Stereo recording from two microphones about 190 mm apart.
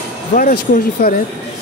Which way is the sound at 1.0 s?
55° left (ahead or behind).